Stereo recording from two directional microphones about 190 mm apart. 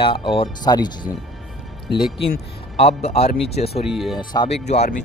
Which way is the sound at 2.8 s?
30° left (ahead or behind).